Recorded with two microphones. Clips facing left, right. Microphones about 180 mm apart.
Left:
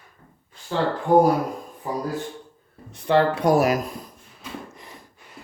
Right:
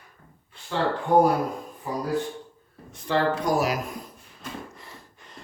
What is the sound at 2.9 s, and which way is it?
Speech, 65° left (ahead or behind).